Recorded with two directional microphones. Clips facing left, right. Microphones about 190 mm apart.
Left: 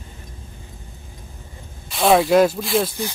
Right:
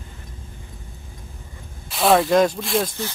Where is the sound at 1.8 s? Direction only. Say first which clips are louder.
Left 1 dB; centre (ahead or behind).